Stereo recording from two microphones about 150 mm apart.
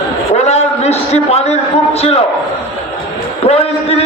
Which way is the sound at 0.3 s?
45° left (ahead or behind).